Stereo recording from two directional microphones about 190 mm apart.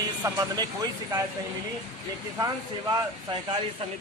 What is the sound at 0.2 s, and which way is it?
A man's voice, 20° right (ahead or behind).